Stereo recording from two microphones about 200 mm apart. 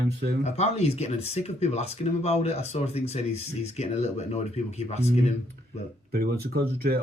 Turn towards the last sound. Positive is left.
turn(degrees=-50)  # may be behind; listen again after turning